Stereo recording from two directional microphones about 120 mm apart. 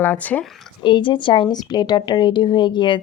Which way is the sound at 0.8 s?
40° left (ahead or behind).